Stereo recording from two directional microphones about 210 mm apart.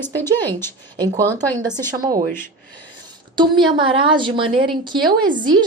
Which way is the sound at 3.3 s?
20° right (ahead or behind).